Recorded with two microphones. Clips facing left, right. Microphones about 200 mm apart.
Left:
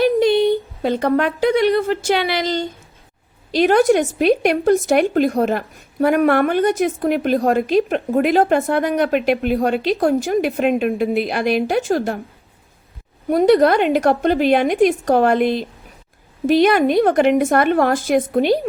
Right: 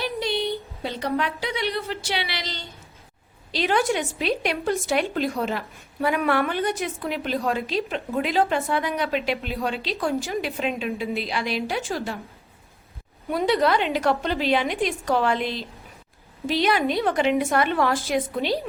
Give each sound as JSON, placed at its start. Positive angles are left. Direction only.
{"t": 0.0, "sound": "a woman's voice", "side_deg": 50}
{"t": 13.3, "sound": "a woman's voice", "side_deg": 50}